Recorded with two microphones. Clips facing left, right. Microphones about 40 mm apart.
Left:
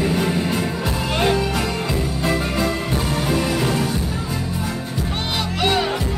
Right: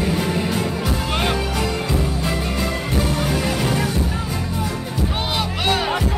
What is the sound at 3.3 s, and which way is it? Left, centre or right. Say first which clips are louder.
Music: left 1 dB; centre.